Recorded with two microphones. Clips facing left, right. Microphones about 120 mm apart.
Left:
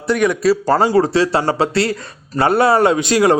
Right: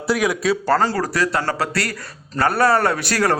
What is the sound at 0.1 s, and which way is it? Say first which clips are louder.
Speech: left 5 dB; 5° right (ahead or behind).